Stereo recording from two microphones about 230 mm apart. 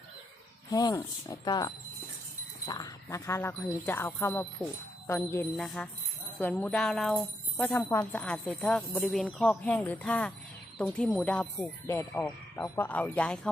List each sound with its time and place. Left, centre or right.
0.7 s speech: centre